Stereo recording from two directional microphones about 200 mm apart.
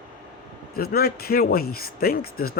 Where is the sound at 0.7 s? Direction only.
50° left (ahead or behind).